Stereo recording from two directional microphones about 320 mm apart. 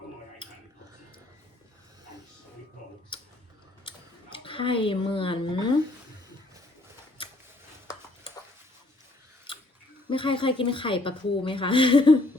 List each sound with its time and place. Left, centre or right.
3.1 s tick-tock: centre
3.8 s speech: centre
9.5 s a sound: centre
10.1 s a woman's voice: centre